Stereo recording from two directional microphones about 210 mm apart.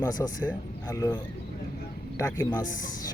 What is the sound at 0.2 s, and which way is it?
Speech, 15° left (ahead or behind).